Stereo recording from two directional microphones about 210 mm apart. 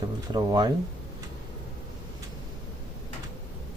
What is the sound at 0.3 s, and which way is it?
Speech, 20° right (ahead or behind).